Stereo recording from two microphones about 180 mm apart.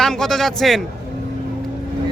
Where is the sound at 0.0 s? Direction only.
Centre (ahead or behind).